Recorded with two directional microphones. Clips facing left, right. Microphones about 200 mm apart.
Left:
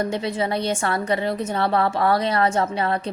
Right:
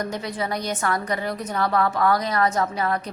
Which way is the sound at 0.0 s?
25° left (ahead or behind).